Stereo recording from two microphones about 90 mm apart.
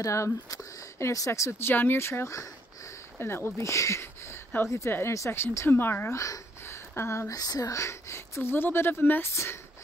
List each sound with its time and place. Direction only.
0.0 s a woman's voice: 35° left (ahead or behind)
7.3 s a woman's voice: 45° left (ahead or behind)